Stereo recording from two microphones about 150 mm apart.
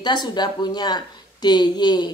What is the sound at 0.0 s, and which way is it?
A woman's voice, 30° left (ahead or behind).